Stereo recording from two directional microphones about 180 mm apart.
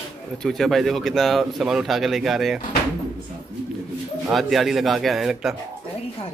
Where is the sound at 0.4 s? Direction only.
Centre (ahead or behind).